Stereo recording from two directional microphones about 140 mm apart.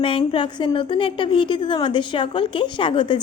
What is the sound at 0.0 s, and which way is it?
A woman's voice, 40° left (ahead or behind).